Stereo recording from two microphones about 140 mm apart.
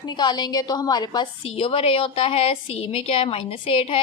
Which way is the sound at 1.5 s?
45° left (ahead or behind).